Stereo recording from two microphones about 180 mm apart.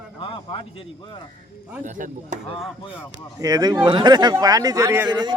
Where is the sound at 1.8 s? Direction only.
45° right (ahead or behind).